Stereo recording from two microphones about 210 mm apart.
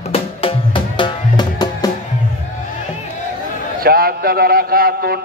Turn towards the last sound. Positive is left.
turn(degrees=-45)  # may be behind; listen again after turning